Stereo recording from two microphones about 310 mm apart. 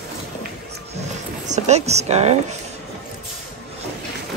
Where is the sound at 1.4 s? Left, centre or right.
Right.